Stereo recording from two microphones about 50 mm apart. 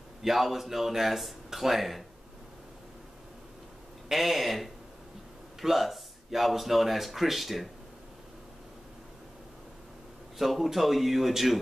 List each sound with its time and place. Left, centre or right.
0.2 s speech: centre
4.1 s speech: centre
10.4 s speech: centre